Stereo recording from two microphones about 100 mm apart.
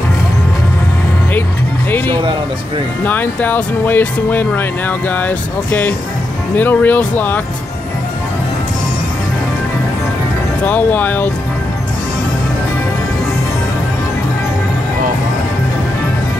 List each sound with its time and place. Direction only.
1.9 s music: 20° left (ahead or behind)
3.1 s speech: 20° left (ahead or behind)
10.6 s speech: 20° left (ahead or behind)